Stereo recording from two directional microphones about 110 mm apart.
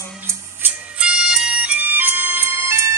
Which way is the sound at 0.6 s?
10° right (ahead or behind).